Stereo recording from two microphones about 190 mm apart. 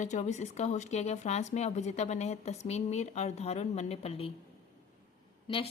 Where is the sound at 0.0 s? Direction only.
40° left (ahead or behind).